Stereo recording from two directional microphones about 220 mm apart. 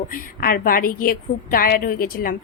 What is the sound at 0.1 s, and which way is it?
A woman's voice, 40° left (ahead or behind).